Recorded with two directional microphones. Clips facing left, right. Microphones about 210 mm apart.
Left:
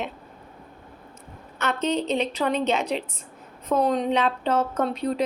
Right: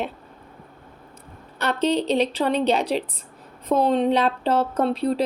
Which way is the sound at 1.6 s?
35° right (ahead or behind).